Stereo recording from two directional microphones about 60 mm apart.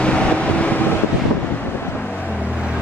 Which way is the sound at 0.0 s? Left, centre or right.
Centre.